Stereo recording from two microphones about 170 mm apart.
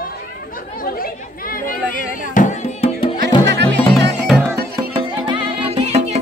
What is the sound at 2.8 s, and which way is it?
Music, 30° left (ahead or behind).